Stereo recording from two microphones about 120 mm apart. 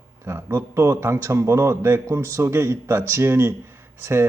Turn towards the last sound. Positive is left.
turn(degrees=-20)  # may be behind; listen again after turning